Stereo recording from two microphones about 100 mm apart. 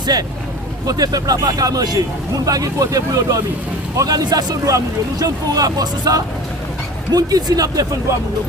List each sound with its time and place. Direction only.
0.0 s speech: 40° right (ahead or behind)